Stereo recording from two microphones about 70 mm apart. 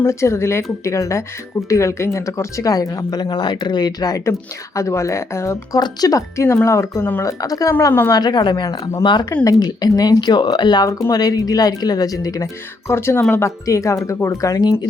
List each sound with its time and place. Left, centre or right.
0.0 s speech: left
3.1 s speech: left
4.3 s speech: left
5.8 s speech: left
6.4 s speech: left
7.2 s speech: left
8.1 s speech: left
9.4 s speech: left
9.6 s speech: left
10.8 s speech: left
12.9 s speech: left
13.7 s speech: left